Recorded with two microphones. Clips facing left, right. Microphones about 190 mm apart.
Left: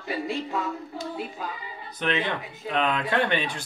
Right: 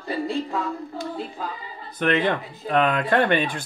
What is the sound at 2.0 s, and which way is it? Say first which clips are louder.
Speech: right 6 dB; 50° right (ahead or behind).